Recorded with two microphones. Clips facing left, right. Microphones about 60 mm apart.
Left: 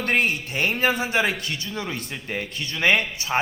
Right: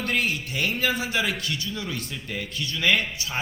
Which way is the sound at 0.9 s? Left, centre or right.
Left.